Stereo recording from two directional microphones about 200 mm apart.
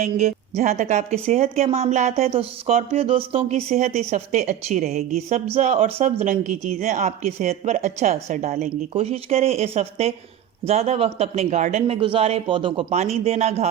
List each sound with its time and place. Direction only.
0.0 s speech: 35° right (ahead or behind)